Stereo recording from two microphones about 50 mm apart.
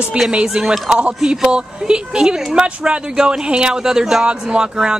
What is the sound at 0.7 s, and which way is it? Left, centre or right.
Speech, right.